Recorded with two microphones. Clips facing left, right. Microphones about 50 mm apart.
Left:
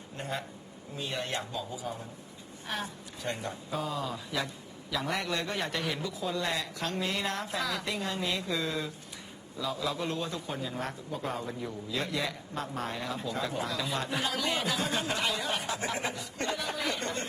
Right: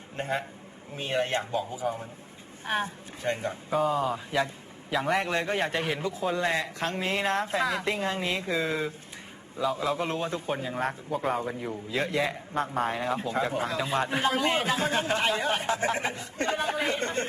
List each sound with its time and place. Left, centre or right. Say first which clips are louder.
0.2 s a man's voice: right 6 dB; right
3.8 s speech: right 9 dB; centre
4.1 s a man's voice: right 6 dB; right